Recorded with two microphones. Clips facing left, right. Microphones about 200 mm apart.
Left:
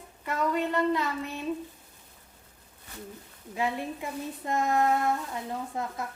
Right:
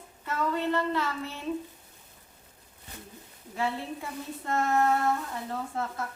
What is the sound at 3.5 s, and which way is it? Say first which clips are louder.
Speech: left 1 dB; 15° left (ahead or behind).